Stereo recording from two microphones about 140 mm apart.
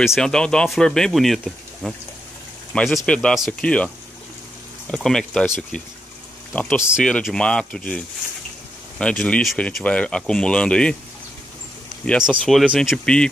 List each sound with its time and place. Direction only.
0.0 s speech: centre (ahead or behind)
12.2 s speech: centre (ahead or behind)